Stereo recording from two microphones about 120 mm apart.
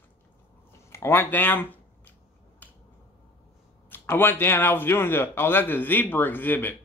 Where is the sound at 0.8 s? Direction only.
20° left (ahead or behind).